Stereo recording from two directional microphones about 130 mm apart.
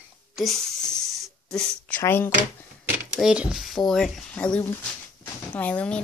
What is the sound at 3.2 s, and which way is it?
Speech, 5° right (ahead or behind).